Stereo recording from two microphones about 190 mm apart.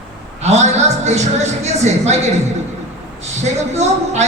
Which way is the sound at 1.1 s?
35° right (ahead or behind).